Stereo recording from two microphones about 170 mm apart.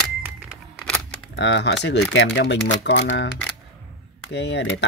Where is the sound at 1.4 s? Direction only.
90° left.